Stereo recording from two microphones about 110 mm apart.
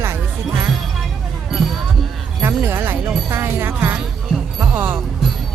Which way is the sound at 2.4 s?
20° right (ahead or behind).